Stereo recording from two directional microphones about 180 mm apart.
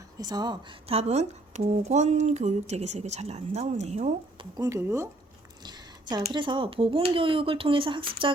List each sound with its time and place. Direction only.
0.2 s speech: 20° right (ahead or behind); by 4.4 s 40° right (ahead or behind)
4.5 s speech: 20° right (ahead or behind)